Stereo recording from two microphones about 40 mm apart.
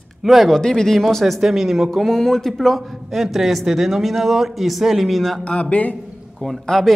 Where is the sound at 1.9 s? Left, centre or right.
Centre.